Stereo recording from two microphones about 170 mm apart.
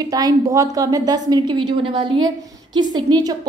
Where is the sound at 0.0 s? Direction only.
20° right (ahead or behind).